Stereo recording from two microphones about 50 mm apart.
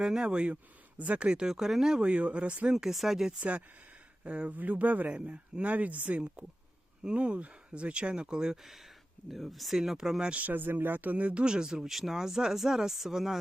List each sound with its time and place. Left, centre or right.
0.0 s speech: centre
0.5 s speech: right; by 2.0 s centre
2.0 s speech: right
2.7 s speech: centre
4.2 s speech: right
10.3 s speech: right
11.4 s speech: centre